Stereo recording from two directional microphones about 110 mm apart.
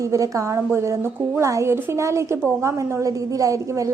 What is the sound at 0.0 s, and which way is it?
A woman's voice, 30° right (ahead or behind).